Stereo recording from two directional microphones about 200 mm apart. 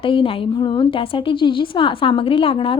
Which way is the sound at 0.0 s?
25° left (ahead or behind).